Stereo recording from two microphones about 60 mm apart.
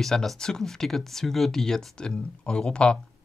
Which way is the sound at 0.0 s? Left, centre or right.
Centre.